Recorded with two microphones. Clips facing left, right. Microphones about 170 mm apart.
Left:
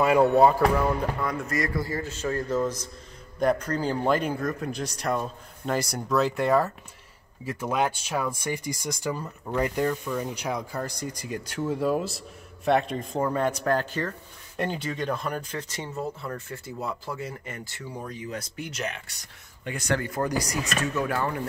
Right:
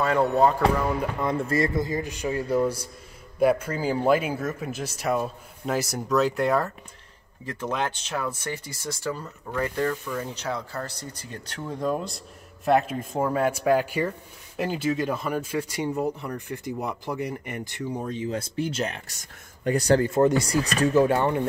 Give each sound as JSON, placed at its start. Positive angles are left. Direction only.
{"t": 0.0, "sound": "speech", "side_deg": 10}
{"t": 1.2, "sound": "speech", "side_deg": -30}